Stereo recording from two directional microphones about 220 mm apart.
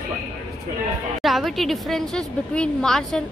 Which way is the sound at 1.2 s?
Centre (ahead or behind).